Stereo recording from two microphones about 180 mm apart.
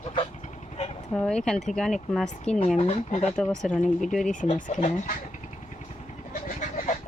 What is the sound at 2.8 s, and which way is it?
Speech, 40° left (ahead or behind).